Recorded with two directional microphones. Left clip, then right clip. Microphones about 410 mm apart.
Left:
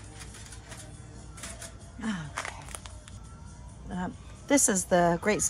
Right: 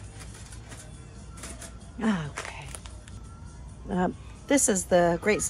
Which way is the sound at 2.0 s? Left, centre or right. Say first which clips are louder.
Right 7 dB; centre.